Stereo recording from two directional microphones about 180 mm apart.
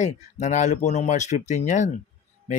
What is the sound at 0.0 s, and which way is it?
Speech, 40° left (ahead or behind).